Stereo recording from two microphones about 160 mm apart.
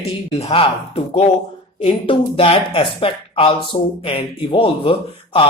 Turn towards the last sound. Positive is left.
turn(degrees=35)  # may be behind; listen again after turning